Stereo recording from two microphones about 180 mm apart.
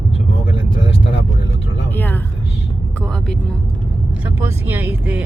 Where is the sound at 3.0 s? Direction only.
5° left (ahead or behind).